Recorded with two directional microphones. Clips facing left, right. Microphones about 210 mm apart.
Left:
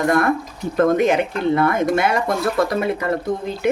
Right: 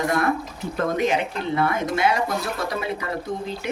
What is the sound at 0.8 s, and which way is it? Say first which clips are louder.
Speech: left 7 dB; 50° left (ahead or behind).